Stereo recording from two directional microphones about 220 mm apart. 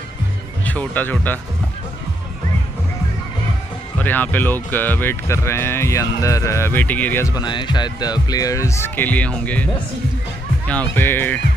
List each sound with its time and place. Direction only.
0.7 s speech: 5° left (ahead or behind)
4.0 s speech: 10° left (ahead or behind)
10.7 s speech: 10° left (ahead or behind)